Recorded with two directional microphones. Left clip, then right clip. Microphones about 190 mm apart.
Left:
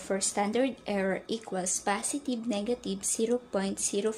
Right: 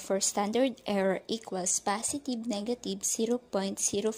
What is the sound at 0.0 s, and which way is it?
Speech, 35° right (ahead or behind).